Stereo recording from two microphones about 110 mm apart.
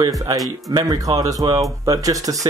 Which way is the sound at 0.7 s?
35° right (ahead or behind).